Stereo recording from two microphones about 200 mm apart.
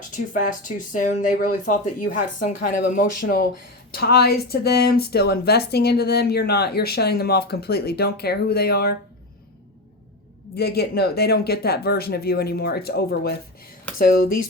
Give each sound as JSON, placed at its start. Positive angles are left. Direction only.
{"t": 0.1, "sound": "speech", "side_deg": 40}
{"t": 10.5, "sound": "speech", "side_deg": 55}